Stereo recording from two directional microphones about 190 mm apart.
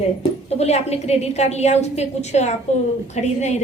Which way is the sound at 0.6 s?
35° left (ahead or behind).